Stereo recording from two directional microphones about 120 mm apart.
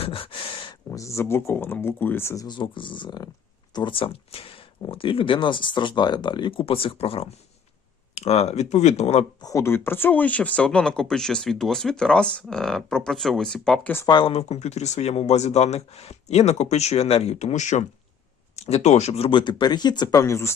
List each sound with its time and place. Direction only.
0.0 s a sound: 50° left (ahead or behind)
0.9 s speech: 25° left (ahead or behind); by 9.2 s 65° left (ahead or behind)
9.4 s speech: 25° left (ahead or behind); by 13.9 s 5° left (ahead or behind)
14.1 s speech: 40° left (ahead or behind)
14.3 s speech: 65° left (ahead or behind); by 17.8 s 85° left
18.5 s speech: 65° left (ahead or behind); by 20.5 s 25° left (ahead or behind)